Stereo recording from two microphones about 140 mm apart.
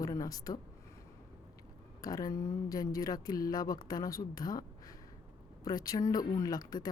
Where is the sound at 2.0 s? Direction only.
25° left (ahead or behind).